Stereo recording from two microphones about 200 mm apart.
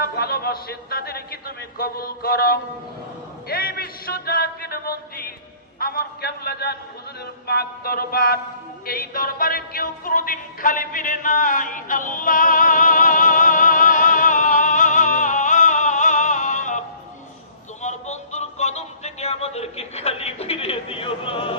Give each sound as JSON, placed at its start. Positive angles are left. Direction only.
{"t": 0.0, "sound": "speech", "side_deg": 50}
{"t": 8.9, "sound": "music", "side_deg": 45}
{"t": 17.8, "sound": "music", "side_deg": 35}